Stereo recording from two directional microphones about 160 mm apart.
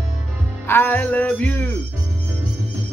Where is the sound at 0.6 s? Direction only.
10° left (ahead or behind).